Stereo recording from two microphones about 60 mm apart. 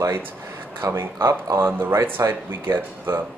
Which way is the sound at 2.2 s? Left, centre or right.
Right.